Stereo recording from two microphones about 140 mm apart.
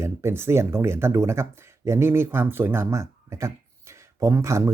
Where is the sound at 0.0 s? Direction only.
20° right (ahead or behind).